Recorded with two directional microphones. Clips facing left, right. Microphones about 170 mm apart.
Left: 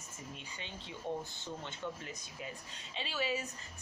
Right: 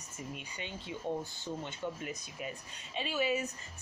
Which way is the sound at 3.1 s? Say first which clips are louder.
Right 4 dB; 15° right (ahead or behind).